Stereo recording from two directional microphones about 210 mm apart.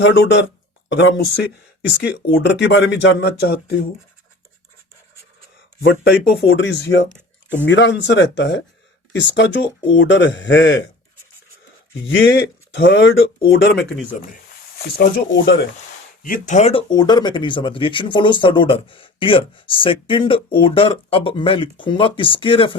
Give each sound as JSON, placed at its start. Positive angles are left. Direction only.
{"t": 0.2, "sound": "speech", "side_deg": 60}
{"t": 5.8, "sound": "speech", "side_deg": 60}
{"t": 12.1, "sound": "speech", "side_deg": 60}
{"t": 16.2, "sound": "speech", "side_deg": 40}
{"t": 16.9, "sound": "speech", "side_deg": 20}